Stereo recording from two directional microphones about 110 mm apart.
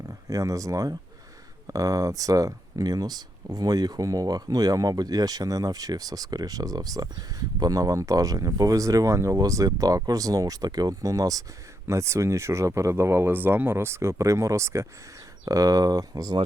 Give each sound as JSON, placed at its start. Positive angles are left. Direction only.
{"t": 0.3, "sound": "speech", "side_deg": -30}